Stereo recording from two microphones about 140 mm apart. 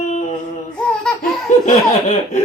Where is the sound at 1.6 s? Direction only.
55° left (ahead or behind).